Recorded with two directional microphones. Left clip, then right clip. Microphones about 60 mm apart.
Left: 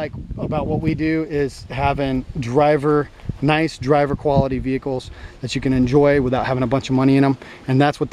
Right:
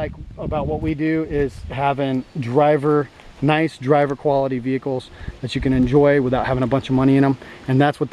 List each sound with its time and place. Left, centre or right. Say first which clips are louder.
0.0 s speech: left 1 dB; left